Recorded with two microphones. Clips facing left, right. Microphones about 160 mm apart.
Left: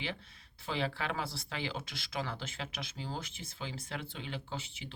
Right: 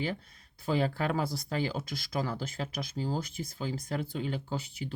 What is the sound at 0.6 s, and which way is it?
Speech, 45° right (ahead or behind).